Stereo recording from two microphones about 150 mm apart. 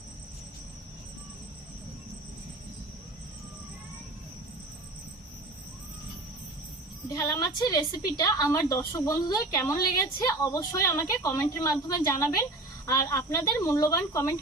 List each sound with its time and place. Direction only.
7.1 s speech: 25° left (ahead or behind)